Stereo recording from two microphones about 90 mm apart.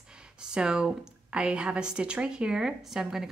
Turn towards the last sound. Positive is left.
turn(degrees=-5)  # may be behind; listen again after turning